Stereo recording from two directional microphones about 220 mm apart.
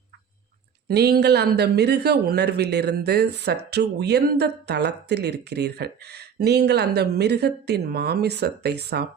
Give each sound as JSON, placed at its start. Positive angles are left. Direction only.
{"t": 0.9, "sound": "speech", "side_deg": -45}